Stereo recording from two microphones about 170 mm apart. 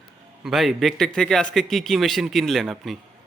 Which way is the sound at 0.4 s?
Centre (ahead or behind).